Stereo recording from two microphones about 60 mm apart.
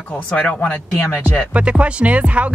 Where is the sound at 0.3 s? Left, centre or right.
Centre.